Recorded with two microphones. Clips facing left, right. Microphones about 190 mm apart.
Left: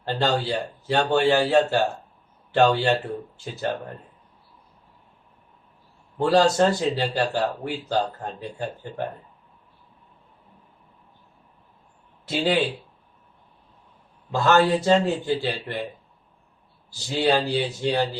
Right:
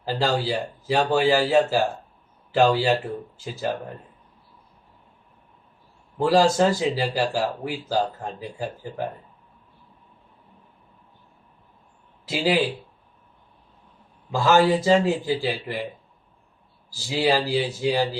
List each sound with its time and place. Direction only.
0.0 s a man's voice: 5° right (ahead or behind)
6.1 s a man's voice: 5° right (ahead or behind)
12.3 s a man's voice: 5° right (ahead or behind)
14.3 s a man's voice: 5° right (ahead or behind)
17.1 s a man's voice: 5° right (ahead or behind)